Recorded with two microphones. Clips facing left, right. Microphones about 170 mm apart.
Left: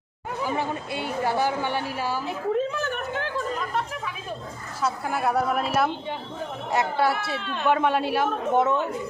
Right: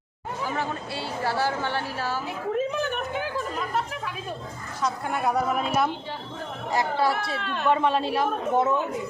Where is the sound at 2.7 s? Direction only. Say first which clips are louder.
Right 1 dB; 20° right (ahead or behind).